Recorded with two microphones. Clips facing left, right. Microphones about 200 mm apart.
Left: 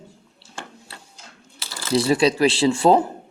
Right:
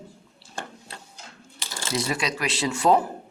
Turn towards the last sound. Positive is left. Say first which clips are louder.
# left 5 dB
turn(degrees=30)  # may be behind; listen again after turning